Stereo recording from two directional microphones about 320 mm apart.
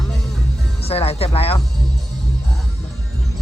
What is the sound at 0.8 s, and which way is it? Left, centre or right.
Speech, centre.